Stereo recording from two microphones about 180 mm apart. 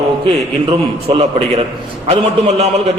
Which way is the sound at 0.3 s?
35° right (ahead or behind).